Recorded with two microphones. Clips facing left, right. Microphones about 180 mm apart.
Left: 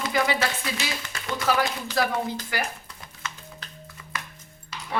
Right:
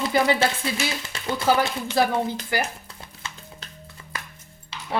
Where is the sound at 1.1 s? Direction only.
25° right (ahead or behind).